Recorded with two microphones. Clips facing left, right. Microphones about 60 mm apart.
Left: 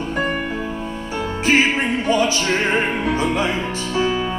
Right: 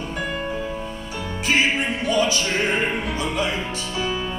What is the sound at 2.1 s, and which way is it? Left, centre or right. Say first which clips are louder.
Music: left 2 dB; left.